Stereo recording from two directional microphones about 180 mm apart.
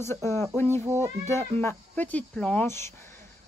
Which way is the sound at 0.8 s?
15° right (ahead or behind).